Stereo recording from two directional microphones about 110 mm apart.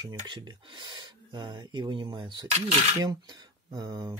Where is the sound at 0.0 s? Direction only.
40° right (ahead or behind).